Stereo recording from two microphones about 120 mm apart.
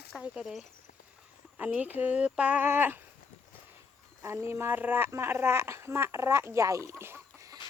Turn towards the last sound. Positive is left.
turn(degrees=-25)  # may be behind; listen again after turning